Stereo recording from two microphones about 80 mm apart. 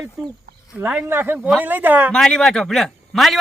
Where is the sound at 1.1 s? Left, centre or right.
Right.